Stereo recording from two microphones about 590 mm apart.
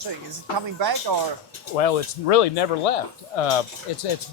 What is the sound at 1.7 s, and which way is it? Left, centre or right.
Speech, left.